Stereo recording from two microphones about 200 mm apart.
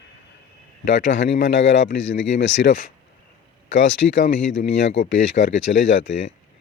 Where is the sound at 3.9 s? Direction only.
65° left (ahead or behind).